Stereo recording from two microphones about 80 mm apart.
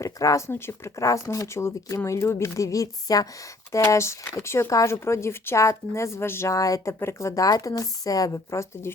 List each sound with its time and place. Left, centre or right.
0.0 s speech: left
0.5 s speech: left
6.5 s speech: left